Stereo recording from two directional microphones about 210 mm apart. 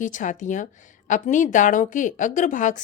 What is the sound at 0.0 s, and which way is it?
A woman's voice, 35° left (ahead or behind).